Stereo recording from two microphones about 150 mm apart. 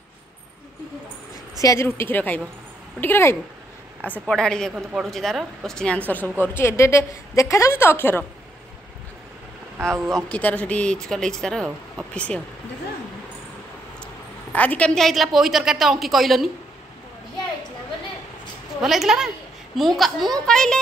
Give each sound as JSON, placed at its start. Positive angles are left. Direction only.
{"t": 1.6, "sound": "a woman's voice", "side_deg": 20}
{"t": 9.8, "sound": "speech", "side_deg": -20}
{"t": 10.1, "sound": "a woman's voice", "side_deg": 10}
{"t": 14.5, "sound": "a woman's voice", "side_deg": 10}
{"t": 18.8, "sound": "a woman's voice", "side_deg": 0}